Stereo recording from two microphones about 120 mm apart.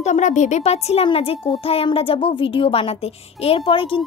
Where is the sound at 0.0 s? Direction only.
85° left.